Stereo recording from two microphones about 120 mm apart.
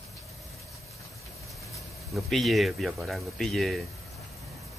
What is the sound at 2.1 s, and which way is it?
Speech, centre (ahead or behind).